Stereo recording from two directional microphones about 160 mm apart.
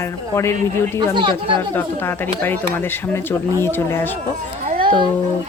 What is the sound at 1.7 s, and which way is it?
Speech, 10° left (ahead or behind).